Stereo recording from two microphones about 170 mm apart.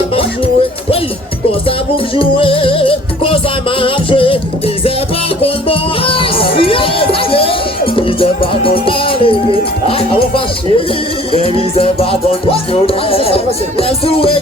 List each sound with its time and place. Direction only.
2.1 s speech: 30° left (ahead or behind)
5.4 s music: 30° left (ahead or behind)
6.6 s crowd: 30° left (ahead or behind)
7.9 s music: 30° left (ahead or behind)
11.3 s speech: 35° left (ahead or behind)